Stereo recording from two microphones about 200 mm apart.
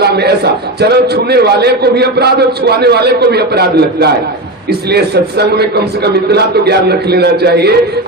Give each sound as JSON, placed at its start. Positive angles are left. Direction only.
{"t": 0.0, "sound": "a man's voice", "side_deg": -55}